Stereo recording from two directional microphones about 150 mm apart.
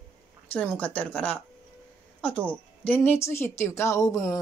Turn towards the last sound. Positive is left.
turn(degrees=20)  # may be behind; listen again after turning